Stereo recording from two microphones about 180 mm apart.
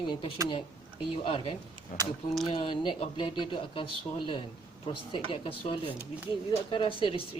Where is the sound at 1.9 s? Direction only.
40° left (ahead or behind).